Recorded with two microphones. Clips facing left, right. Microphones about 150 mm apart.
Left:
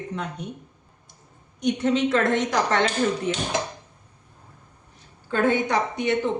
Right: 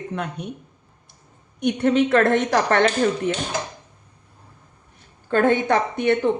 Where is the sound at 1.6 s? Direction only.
60° right (ahead or behind).